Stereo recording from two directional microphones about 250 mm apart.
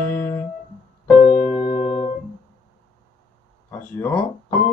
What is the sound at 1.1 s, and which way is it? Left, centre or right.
Music, left.